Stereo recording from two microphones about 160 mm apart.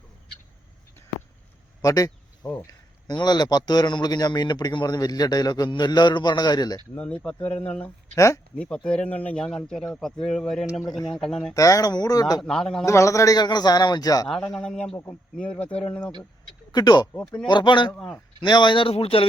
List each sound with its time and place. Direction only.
1.8 s speech: 20° left (ahead or behind)
2.4 s speech: 5° left (ahead or behind)
3.1 s a man's voice: 25° left (ahead or behind)
6.9 s speech: 10° left (ahead or behind)
8.1 s speech: 20° left (ahead or behind)
8.5 s speech: 5° left (ahead or behind)
11.5 s a man's voice: 20° left (ahead or behind)
12.4 s speech: centre (ahead or behind)
12.8 s a man's voice: 20° left (ahead or behind)
14.3 s speech: 5° left (ahead or behind)
16.7 s a man's voice: 25° left (ahead or behind)
17.9 s speech: 5° left (ahead or behind)
18.3 s speech: 30° left (ahead or behind)